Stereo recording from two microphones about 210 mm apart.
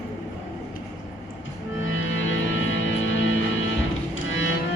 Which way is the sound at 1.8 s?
65° left (ahead or behind).